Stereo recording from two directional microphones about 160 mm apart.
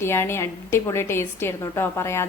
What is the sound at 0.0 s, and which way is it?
A woman's voice, 15° left (ahead or behind).